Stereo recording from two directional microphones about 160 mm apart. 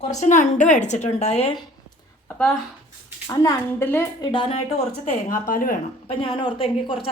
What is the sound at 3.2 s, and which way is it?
Speech, 20° left (ahead or behind).